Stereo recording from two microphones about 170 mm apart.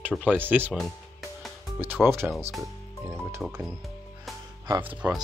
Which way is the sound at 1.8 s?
10° right (ahead or behind).